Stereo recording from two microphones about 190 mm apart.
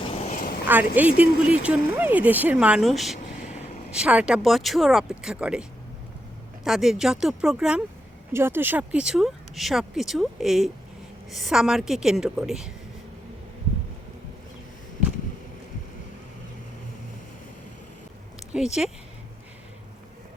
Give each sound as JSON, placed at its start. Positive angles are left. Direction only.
{"t": 0.1, "sound": "a sound", "side_deg": 35}
{"t": 0.7, "sound": "speech", "side_deg": -10}
{"t": 6.7, "sound": "speech", "side_deg": 0}
{"t": 18.5, "sound": "speech", "side_deg": -5}